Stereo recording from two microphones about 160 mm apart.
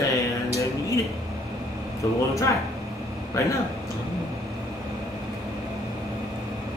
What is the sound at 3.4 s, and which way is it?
Speech, 20° left (ahead or behind).